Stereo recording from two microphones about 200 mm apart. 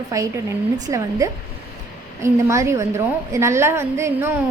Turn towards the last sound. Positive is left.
turn(degrees=-15)  # may be behind; listen again after turning